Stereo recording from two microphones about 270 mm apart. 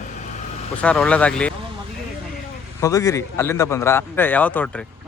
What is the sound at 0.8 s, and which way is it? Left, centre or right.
Speech, centre.